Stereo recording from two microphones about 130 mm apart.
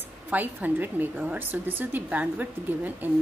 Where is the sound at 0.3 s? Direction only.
15° right (ahead or behind).